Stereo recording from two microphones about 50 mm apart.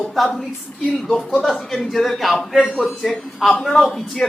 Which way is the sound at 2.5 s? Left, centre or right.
Centre.